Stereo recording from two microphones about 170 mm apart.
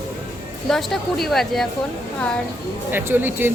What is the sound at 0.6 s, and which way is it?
Speech, centre (ahead or behind).